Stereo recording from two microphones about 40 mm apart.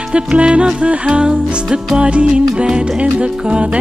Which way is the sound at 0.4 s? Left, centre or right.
Right.